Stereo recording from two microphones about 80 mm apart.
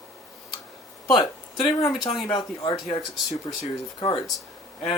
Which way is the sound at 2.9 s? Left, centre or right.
Left.